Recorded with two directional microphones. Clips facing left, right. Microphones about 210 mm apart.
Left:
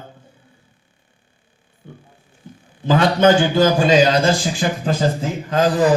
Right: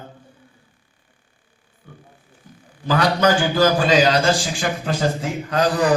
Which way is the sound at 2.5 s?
25° left (ahead or behind).